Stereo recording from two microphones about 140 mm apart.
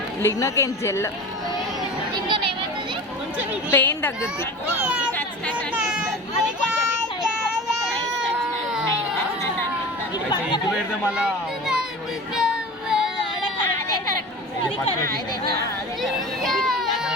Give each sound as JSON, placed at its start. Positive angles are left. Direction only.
{"t": 0.2, "sound": "a woman's voice", "side_deg": 20}
{"t": 2.2, "sound": "a sound", "side_deg": -35}
{"t": 3.7, "sound": "speech", "side_deg": 15}
{"t": 4.8, "sound": "speech", "side_deg": -5}
{"t": 5.7, "sound": "a sound", "side_deg": -5}
{"t": 12.4, "sound": "child singing", "side_deg": -5}
{"t": 13.4, "sound": "a sound", "side_deg": 35}
{"t": 15.0, "sound": "speech", "side_deg": -90}
{"t": 16.0, "sound": "speech", "side_deg": 0}